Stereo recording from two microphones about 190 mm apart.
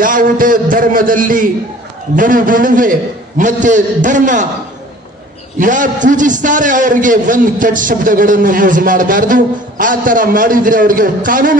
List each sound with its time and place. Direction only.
0.0 s a man's voice: 45° right (ahead or behind)
5.6 s a man's voice: 45° right (ahead or behind)